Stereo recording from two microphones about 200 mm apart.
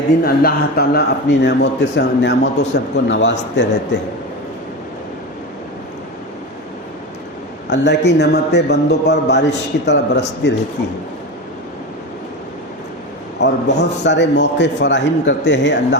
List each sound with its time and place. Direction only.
0.4 s a man's voice: 55° left (ahead or behind)
7.7 s a man's voice: 60° left (ahead or behind)
13.4 s a man's voice: 60° left (ahead or behind)